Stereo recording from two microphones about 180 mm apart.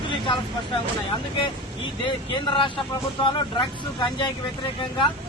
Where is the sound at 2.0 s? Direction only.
25° left (ahead or behind).